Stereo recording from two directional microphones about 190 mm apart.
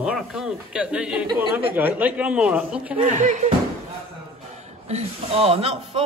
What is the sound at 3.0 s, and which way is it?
Speech, 40° right (ahead or behind).